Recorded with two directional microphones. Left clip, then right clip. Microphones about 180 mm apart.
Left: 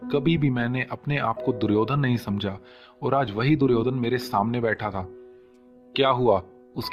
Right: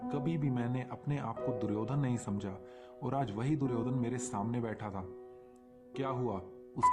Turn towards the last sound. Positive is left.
turn(degrees=35)  # may be behind; listen again after turning